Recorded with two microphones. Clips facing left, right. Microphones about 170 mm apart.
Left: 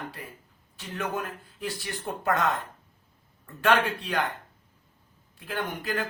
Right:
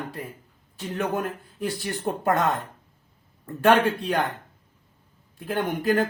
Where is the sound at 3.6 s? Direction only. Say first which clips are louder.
Right 5 dB; 45° right (ahead or behind).